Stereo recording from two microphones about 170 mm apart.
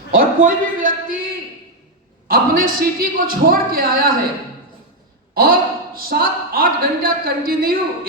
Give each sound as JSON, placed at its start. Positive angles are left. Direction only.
{"t": 0.2, "sound": "speech", "side_deg": -55}
{"t": 5.3, "sound": "speech", "side_deg": -60}